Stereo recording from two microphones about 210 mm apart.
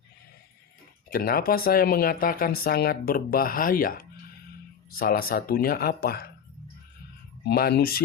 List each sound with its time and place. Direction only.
1.1 s speech: 45° left (ahead or behind)
7.4 s speech: 50° left (ahead or behind)